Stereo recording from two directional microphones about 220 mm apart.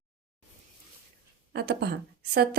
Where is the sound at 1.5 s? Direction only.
45° right (ahead or behind).